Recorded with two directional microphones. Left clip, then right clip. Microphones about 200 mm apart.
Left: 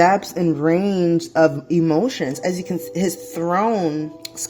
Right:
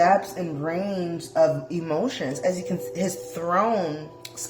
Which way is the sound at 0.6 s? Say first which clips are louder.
Left 9 dB; 40° left (ahead or behind).